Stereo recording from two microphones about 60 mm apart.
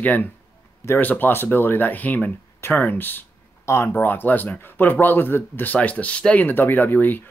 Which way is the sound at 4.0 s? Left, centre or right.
Left.